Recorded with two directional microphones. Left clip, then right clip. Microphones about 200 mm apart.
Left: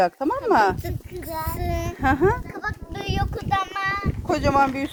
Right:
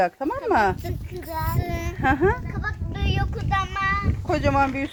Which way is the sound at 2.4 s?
35° left (ahead or behind).